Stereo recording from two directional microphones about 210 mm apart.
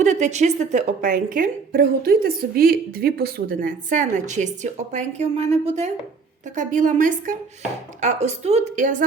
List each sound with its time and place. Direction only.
0.0 s a woman's voice: 35° right (ahead or behind)